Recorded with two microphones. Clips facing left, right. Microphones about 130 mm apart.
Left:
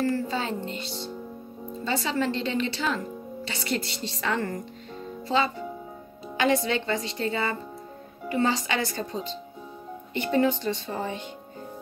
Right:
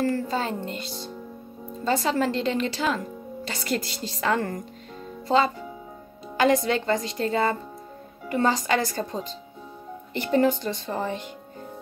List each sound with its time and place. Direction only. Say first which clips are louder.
0.0 s a woman's voice: right 1 dB; 45° right (ahead or behind)
6.3 s a woman's voice: right 3 dB; 45° right (ahead or behind)